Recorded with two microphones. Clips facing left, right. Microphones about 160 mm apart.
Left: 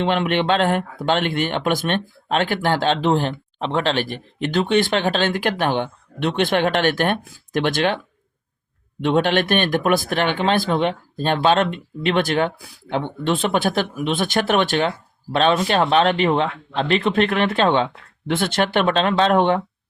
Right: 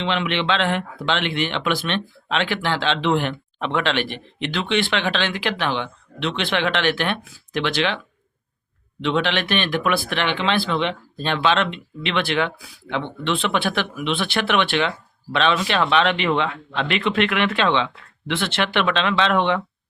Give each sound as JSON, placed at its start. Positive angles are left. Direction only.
{"t": 0.0, "sound": "speech", "side_deg": 50}
{"t": 9.0, "sound": "speech", "side_deg": 50}